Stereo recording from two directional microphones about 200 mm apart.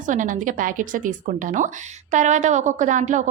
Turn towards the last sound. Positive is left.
turn(degrees=-40)  # may be behind; listen again after turning